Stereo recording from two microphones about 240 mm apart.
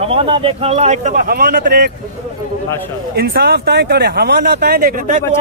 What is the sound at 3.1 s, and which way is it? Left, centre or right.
A man's voice, right.